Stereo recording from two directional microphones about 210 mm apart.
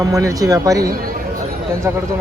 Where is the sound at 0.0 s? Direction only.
15° right (ahead or behind).